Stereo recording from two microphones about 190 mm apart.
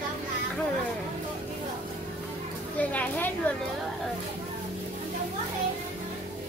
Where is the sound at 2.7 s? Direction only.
10° left (ahead or behind).